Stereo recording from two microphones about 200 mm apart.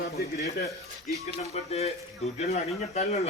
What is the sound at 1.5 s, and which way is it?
Speech, 30° left (ahead or behind).